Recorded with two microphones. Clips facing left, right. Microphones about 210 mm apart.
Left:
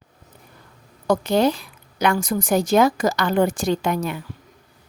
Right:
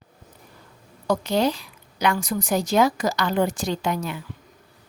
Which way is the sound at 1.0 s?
50° left (ahead or behind).